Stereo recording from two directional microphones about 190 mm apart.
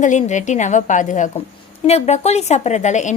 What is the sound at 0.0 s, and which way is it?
A woman's voice, 40° left (ahead or behind).